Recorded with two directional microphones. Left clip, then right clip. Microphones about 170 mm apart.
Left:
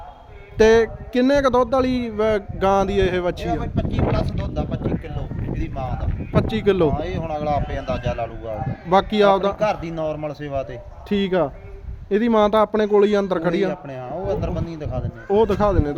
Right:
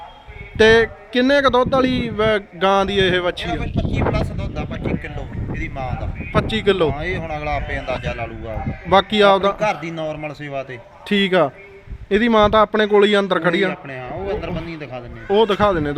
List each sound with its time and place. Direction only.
0.5 s a man's voice: 5° left (ahead or behind)
7.0 s a man's voice: 15° left (ahead or behind)
8.9 s a man's voice: 5° left (ahead or behind)
9.6 s a man's voice: 15° left (ahead or behind)
11.1 s a man's voice: 10° right (ahead or behind)
13.8 s a man's voice: 15° left (ahead or behind)
15.3 s a man's voice: centre (ahead or behind)